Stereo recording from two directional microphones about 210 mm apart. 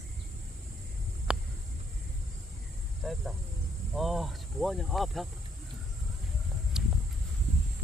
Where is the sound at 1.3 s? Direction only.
5° right (ahead or behind).